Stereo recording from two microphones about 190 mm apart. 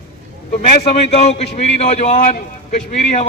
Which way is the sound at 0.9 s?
35° left (ahead or behind).